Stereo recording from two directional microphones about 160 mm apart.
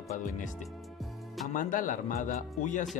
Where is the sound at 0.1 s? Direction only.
50° left (ahead or behind).